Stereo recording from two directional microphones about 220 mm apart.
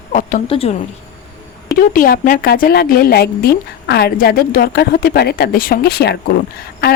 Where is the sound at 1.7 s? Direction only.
40° left (ahead or behind).